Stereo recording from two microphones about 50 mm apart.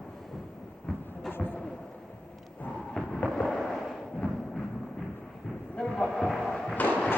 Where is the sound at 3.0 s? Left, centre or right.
Centre.